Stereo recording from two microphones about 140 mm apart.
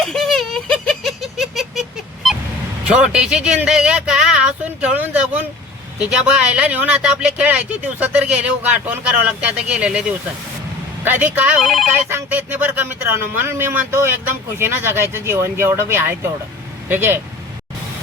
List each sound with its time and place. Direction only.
0.0 s giggle: centre (ahead or behind)
2.9 s speech: 5° right (ahead or behind)
11.0 s speech: 15° right (ahead or behind)
11.6 s speech: centre (ahead or behind)
11.9 s speech: 15° right (ahead or behind)